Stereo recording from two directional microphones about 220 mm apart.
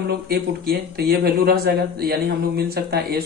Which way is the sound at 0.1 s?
45° right (ahead or behind).